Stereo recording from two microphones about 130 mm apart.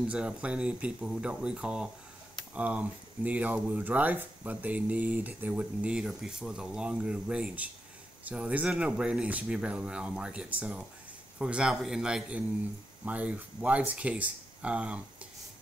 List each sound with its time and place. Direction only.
0.0 s a man's voice: 10° right (ahead or behind)